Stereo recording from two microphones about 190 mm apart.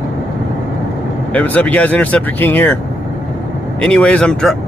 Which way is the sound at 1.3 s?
10° left (ahead or behind).